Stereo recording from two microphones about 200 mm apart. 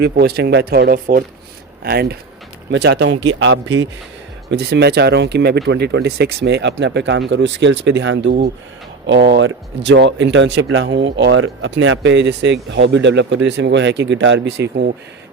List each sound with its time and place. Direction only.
0.0 s speech: 55° right (ahead or behind)
4.5 s speech: 55° right (ahead or behind)